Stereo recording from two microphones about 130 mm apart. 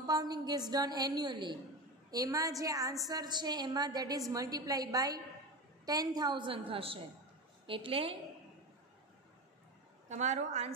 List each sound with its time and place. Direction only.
0.0 s a woman's voice: 30° right (ahead or behind)
10.0 s a woman's voice: 65° right (ahead or behind)